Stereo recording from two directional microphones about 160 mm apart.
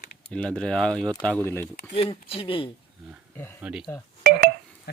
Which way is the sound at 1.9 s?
35° left (ahead or behind).